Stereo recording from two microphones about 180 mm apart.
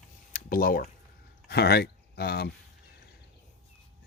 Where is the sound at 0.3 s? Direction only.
55° left (ahead or behind).